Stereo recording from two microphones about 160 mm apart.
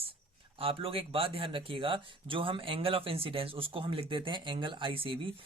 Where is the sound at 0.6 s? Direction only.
35° right (ahead or behind).